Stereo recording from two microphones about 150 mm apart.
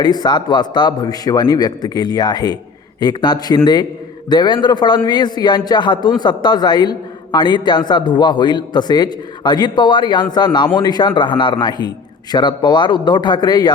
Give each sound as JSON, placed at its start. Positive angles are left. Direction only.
{"t": 0.0, "sound": "a man's voice", "side_deg": 25}